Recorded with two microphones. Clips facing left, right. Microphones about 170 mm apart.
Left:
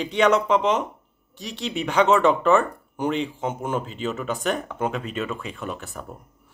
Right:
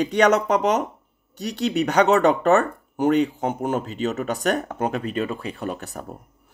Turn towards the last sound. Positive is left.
turn(degrees=-40)  # may be behind; listen again after turning